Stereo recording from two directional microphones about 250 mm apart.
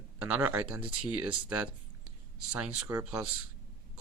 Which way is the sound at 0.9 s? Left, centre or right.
Right.